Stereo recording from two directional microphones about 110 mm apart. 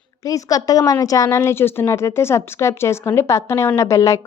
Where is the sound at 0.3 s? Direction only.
30° left (ahead or behind).